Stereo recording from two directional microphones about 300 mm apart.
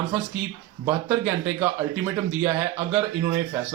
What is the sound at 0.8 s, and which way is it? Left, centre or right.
A man's voice, centre.